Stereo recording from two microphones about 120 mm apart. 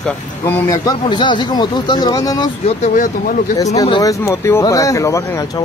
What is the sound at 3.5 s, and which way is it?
Speech, 30° left (ahead or behind).